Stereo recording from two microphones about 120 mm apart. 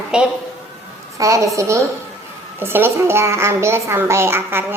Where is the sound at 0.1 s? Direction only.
5° right (ahead or behind).